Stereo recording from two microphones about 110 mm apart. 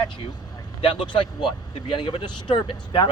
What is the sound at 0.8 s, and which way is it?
Speech, 50° left (ahead or behind).